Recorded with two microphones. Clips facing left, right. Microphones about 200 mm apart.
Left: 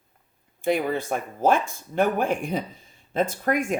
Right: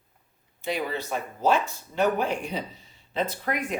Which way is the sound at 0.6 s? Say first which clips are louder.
Left 6 dB; 50° left (ahead or behind).